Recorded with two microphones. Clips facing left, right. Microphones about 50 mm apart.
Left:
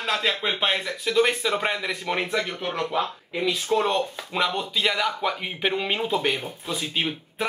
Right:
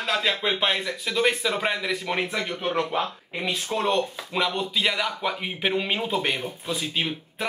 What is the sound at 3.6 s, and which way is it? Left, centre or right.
Speech, centre.